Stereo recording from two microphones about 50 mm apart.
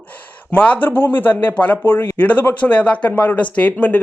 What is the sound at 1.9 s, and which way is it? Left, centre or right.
Speech, left.